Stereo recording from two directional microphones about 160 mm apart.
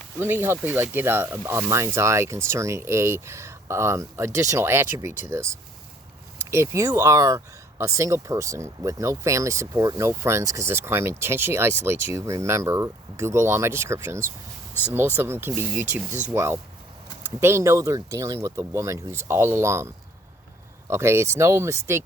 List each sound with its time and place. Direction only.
0.2 s speech: 15° right (ahead or behind)
6.5 s speech: 15° right (ahead or behind)
20.9 s speech: 15° right (ahead or behind)